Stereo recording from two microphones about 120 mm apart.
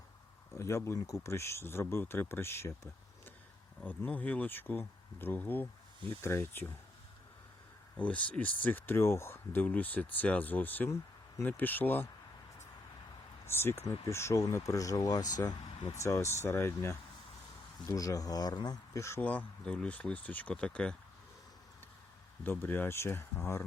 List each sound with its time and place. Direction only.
0.5 s speech: 25° left (ahead or behind)
7.9 s speech: 10° left (ahead or behind)
13.4 s speech: 20° left (ahead or behind)
19.2 s speech: 15° left (ahead or behind)
22.4 s speech: 15° left (ahead or behind)